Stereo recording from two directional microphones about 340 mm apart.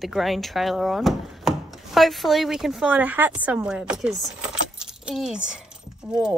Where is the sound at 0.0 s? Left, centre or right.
Centre.